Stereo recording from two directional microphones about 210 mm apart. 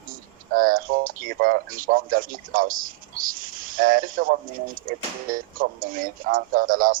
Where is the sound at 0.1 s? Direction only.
40° right (ahead or behind).